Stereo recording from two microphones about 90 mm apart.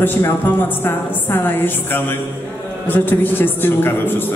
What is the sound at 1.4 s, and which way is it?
A man's voice, 20° left (ahead or behind).